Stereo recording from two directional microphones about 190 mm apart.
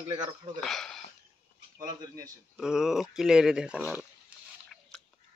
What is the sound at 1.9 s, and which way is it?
Speech, 20° right (ahead or behind).